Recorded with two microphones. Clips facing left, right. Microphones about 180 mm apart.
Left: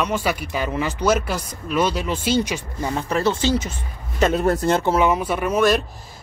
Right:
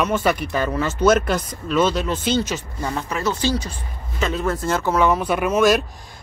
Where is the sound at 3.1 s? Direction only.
30° left (ahead or behind).